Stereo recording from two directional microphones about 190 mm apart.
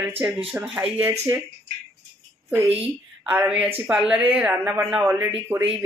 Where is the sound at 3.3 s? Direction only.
5° right (ahead or behind).